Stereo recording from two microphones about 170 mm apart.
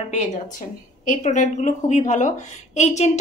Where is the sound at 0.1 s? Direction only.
45° left (ahead or behind).